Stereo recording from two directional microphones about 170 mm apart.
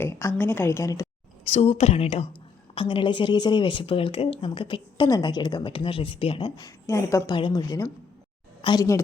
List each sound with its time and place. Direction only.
0.0 s a woman's voice: 15° left (ahead or behind)
1.5 s speech: 35° left (ahead or behind)